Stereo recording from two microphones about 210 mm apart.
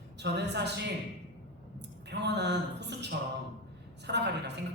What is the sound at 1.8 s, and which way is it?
A woman's voice, 55° right (ahead or behind).